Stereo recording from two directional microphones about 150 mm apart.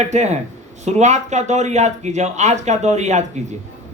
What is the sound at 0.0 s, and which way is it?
A man's voice, 50° right (ahead or behind).